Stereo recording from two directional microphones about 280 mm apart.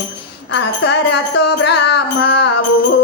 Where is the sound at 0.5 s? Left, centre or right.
Left.